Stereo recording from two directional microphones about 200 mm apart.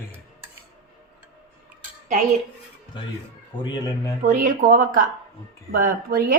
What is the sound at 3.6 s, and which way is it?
Speech, 20° left (ahead or behind).